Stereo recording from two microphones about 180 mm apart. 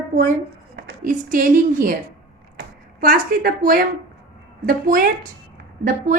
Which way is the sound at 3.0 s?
55° right (ahead or behind).